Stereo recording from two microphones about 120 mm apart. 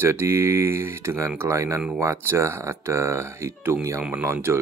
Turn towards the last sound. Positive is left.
turn(degrees=-15)  # may be behind; listen again after turning